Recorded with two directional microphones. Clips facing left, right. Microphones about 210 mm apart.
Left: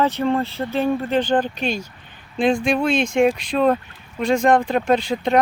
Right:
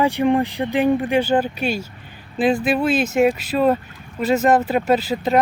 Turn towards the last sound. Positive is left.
turn(degrees=-5)  # may be behind; listen again after turning